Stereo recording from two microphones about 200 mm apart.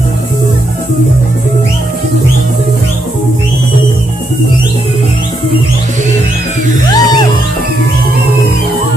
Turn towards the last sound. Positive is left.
turn(degrees=20)  # may be behind; listen again after turning